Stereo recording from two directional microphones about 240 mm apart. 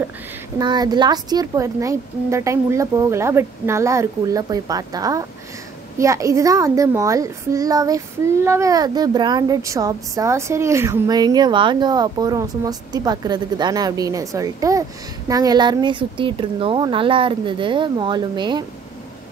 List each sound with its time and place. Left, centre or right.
0.6 s speech: centre